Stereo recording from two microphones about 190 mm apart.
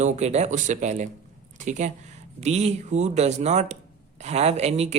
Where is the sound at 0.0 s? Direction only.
35° right (ahead or behind).